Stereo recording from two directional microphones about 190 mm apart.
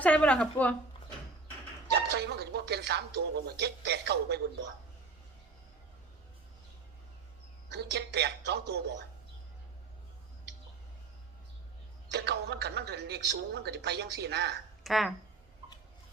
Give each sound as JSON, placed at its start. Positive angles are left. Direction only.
{"t": 0.0, "sound": "a woman's voice", "side_deg": 5}
{"t": 1.9, "sound": "speech", "side_deg": -60}
{"t": 7.7, "sound": "speech", "side_deg": -65}
{"t": 12.0, "sound": "speech", "side_deg": -60}
{"t": 14.8, "sound": "speech", "side_deg": 0}